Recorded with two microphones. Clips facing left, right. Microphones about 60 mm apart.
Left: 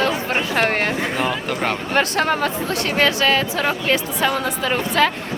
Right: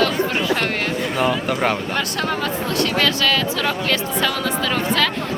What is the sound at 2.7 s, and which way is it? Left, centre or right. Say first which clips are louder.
Speech: even; left.